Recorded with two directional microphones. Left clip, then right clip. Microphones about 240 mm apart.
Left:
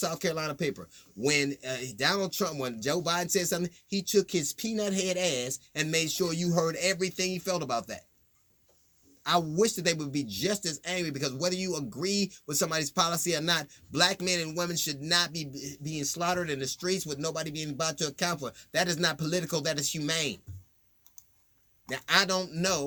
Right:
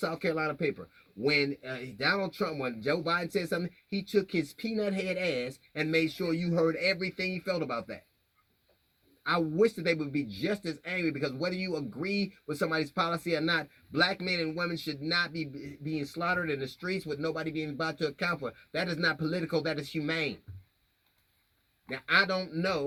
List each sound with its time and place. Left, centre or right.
0.0 s speech: left
9.2 s speech: left
21.8 s speech: left